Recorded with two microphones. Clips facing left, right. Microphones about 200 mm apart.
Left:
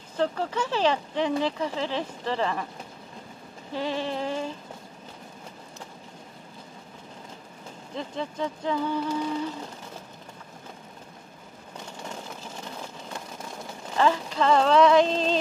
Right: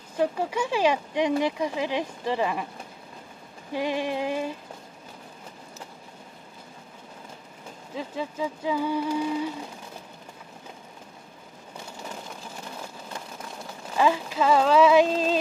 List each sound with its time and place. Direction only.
0.2 s speech: 10° right (ahead or behind)
3.7 s speech: 15° right (ahead or behind)
7.9 s speech: 5° right (ahead or behind)
13.9 s speech: 10° right (ahead or behind)